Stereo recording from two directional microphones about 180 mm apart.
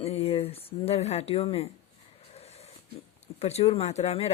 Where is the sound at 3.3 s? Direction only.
35° left (ahead or behind).